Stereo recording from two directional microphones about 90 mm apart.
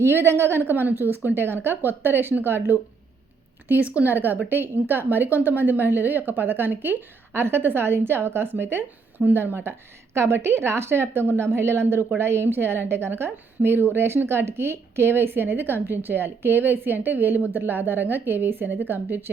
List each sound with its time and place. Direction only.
0.0 s a woman's voice: 25° right (ahead or behind)
3.9 s a woman's voice: 20° right (ahead or behind)